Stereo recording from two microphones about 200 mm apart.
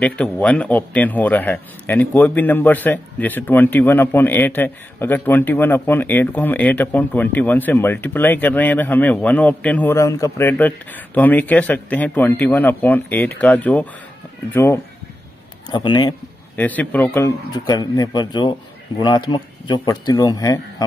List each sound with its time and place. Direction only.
0.0 s a man's voice: 5° left (ahead or behind); by 16.2 s 20° left (ahead or behind)
16.5 s a man's voice: 10° left (ahead or behind)
17.5 s speech: 20° left (ahead or behind)